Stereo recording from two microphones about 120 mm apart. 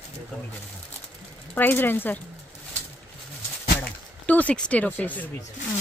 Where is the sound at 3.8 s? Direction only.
10° left (ahead or behind).